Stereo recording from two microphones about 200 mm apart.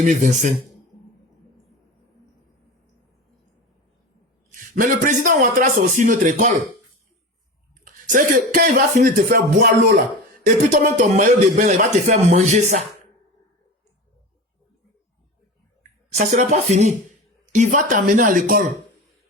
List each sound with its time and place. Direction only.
0.0 s speech: 40° right (ahead or behind)
4.5 s speech: 45° right (ahead or behind)
7.9 s speech: 40° right (ahead or behind)
16.3 s speech: 35° right (ahead or behind)